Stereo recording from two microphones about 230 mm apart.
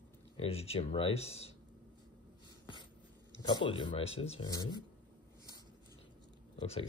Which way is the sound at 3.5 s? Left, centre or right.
Left.